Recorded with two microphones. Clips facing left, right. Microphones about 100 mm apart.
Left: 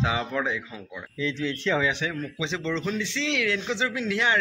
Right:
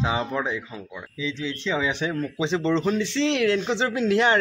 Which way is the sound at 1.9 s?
35° right (ahead or behind).